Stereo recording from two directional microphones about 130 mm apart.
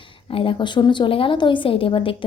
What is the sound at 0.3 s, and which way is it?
A woman's voice, 45° left (ahead or behind).